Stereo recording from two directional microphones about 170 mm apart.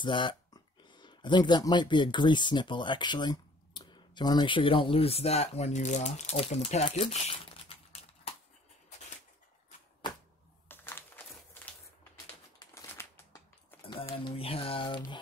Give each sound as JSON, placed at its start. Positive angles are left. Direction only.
{"t": 0.0, "sound": "speech", "side_deg": 30}
{"t": 10.7, "sound": "a sound", "side_deg": 10}
{"t": 12.5, "sound": "crushing", "side_deg": 15}
{"t": 14.1, "sound": "speech", "side_deg": 30}